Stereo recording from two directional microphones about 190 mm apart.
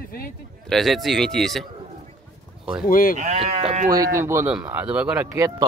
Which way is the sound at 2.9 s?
50° left (ahead or behind).